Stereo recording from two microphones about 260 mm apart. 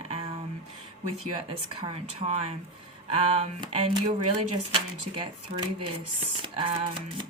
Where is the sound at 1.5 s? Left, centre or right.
Centre.